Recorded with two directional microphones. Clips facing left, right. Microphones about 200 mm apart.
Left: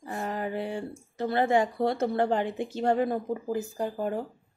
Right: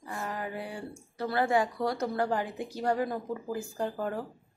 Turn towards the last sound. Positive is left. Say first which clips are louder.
# left 2 dB
turn(degrees=15)  # may be behind; listen again after turning